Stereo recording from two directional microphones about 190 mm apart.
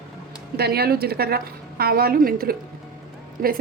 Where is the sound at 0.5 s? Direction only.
55° right (ahead or behind).